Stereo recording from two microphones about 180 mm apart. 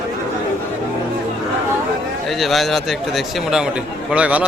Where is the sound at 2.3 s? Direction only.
Centre (ahead or behind).